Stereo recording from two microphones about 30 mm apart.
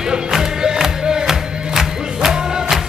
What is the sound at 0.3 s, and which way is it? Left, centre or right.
Music, right.